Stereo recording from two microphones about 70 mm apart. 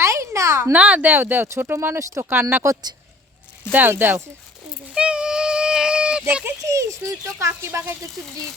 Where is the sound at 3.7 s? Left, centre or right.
Right.